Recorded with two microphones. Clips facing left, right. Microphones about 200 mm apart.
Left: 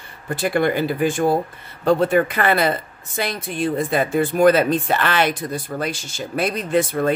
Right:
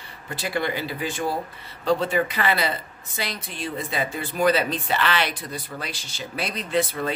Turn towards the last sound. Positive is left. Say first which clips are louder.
# left 5 dB
turn(degrees=50)  # may be behind; listen again after turning